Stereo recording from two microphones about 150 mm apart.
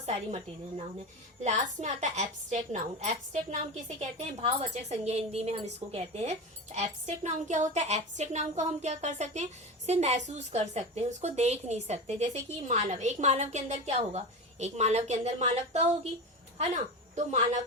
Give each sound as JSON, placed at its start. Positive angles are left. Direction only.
{"t": 0.0, "sound": "a woman's voice", "side_deg": -50}